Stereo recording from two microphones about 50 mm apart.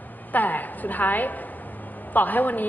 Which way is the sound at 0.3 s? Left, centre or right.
Left.